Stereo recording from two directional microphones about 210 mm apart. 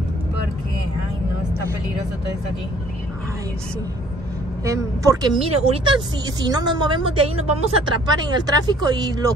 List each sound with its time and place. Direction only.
4.6 s a woman's voice: 20° right (ahead or behind)